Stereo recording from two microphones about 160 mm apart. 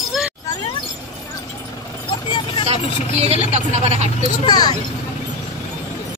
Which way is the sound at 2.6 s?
40° right (ahead or behind).